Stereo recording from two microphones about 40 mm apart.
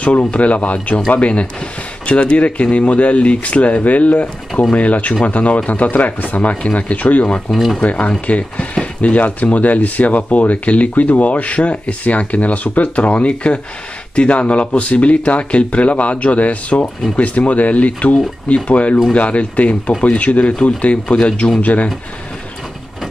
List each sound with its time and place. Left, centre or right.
0.0 s speech: left